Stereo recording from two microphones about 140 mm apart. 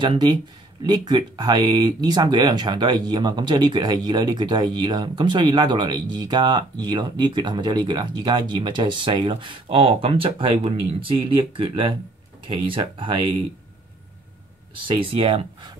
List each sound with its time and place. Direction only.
0.0 s speech: 35° right (ahead or behind)
14.9 s speech: 40° right (ahead or behind)